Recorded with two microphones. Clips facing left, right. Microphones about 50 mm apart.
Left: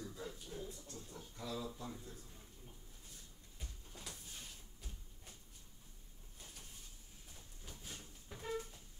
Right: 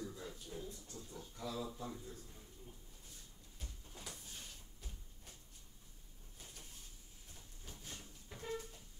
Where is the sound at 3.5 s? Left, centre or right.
Centre.